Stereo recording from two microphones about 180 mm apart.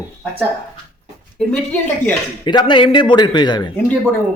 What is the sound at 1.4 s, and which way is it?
Speech, 5° left (ahead or behind).